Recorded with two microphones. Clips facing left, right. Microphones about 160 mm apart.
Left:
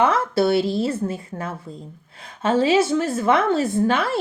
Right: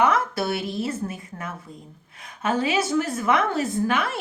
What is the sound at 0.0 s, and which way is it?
Speech, 30° left (ahead or behind).